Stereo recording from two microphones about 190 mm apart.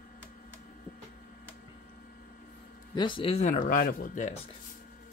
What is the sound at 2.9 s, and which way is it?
Speech, 25° left (ahead or behind).